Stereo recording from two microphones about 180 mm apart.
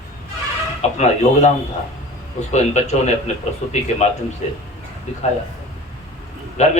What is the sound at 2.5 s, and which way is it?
Speech, 40° left (ahead or behind).